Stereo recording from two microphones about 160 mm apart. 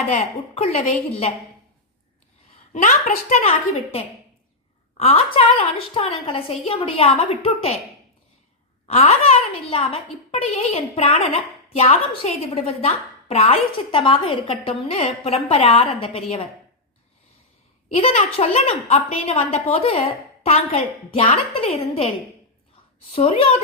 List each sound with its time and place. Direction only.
0.5 s a woman's voice: 45° left (ahead or behind)
2.7 s a woman's voice: 50° left (ahead or behind)
4.9 s a woman's voice: 35° left (ahead or behind)
8.9 s a woman's voice: 40° left (ahead or behind)
17.9 s a woman's voice: 40° left (ahead or behind)
23.1 s a woman's voice: 40° left (ahead or behind)